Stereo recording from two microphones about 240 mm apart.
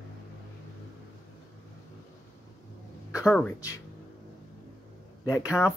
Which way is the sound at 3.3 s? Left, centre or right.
Centre.